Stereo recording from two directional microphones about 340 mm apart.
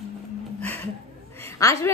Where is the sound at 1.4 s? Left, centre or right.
Centre.